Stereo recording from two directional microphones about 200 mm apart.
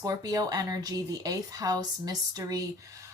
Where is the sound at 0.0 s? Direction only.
20° right (ahead or behind).